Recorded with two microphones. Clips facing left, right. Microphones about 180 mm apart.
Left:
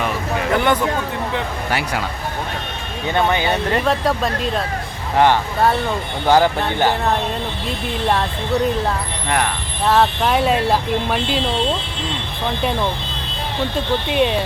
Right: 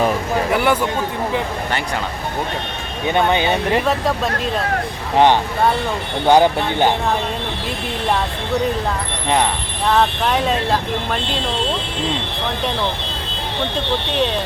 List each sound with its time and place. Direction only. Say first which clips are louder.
0.5 s a sound: left 1 dB; 5° right (ahead or behind)
3.1 s speech: right 1 dB; 20° right (ahead or behind)
3.8 s speech: left 1 dB; centre (ahead or behind)
5.1 s speech: right 1 dB; 20° right (ahead or behind)
9.8 s speech: left 1 dB; 5° left (ahead or behind)
14.1 s speech: left 3 dB; 10° left (ahead or behind)